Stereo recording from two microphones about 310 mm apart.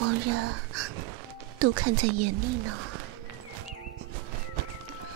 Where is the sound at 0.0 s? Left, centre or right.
Right.